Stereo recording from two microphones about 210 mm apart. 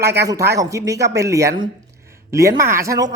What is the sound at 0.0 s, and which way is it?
A woman's voice, 10° right (ahead or behind).